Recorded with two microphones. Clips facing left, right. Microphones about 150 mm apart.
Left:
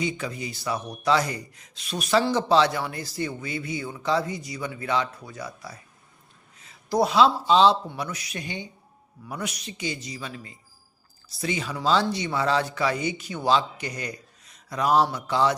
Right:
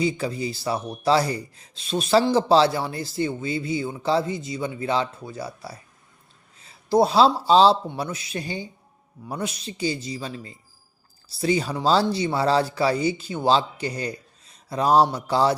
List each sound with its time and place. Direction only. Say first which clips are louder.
0.0 s speech: right 5 dB; 30° right (ahead or behind)